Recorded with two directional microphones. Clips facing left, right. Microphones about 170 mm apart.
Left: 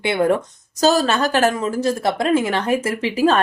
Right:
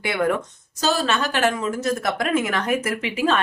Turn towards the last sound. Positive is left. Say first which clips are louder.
# left 5 dB
turn(degrees=40)  # may be behind; listen again after turning